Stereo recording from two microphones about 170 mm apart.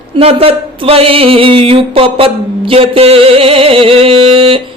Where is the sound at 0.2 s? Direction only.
35° right (ahead or behind).